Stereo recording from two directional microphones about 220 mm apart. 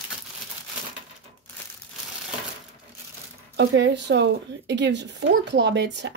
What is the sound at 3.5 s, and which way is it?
A woman's voice, 50° right (ahead or behind).